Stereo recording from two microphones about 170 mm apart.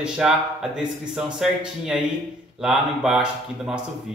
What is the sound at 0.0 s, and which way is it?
Speech, 5° right (ahead or behind).